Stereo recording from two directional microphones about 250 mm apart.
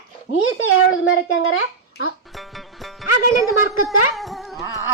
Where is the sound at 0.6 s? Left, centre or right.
Left.